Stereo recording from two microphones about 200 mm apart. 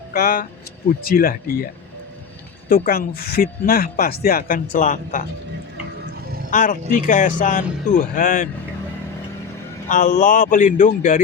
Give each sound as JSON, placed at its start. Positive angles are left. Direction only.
{"t": 0.1, "sound": "speech", "side_deg": 45}
{"t": 2.6, "sound": "speech", "side_deg": 45}
{"t": 6.5, "sound": "speech", "side_deg": 40}
{"t": 9.9, "sound": "speech", "side_deg": 40}